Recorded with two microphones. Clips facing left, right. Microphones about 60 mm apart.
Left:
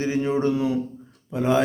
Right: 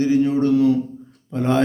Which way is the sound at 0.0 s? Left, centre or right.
Left.